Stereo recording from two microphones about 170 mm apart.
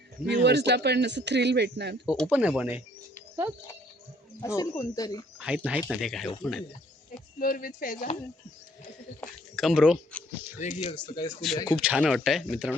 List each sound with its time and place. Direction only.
0.4 s speech: 85° right
2.0 s speech: 5° right (ahead or behind)
4.4 s speech: 20° left (ahead or behind)
5.4 s speech: 5° right (ahead or behind)
7.3 s speech: 55° left (ahead or behind)
9.6 s speech: centre (ahead or behind)
10.6 s speech: 45° left (ahead or behind)
10.9 s speech: 25° left (ahead or behind)
11.8 s speech: 5° right (ahead or behind)